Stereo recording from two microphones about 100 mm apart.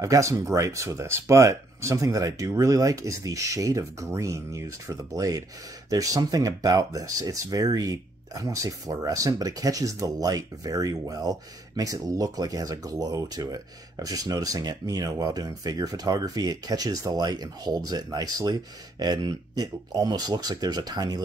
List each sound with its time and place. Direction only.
0.0 s speech: 35° right (ahead or behind)